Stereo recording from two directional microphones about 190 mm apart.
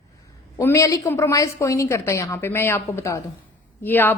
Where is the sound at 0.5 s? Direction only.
15° left (ahead or behind).